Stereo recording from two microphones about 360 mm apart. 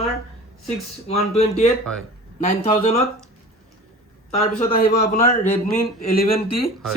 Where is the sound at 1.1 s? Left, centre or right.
Centre.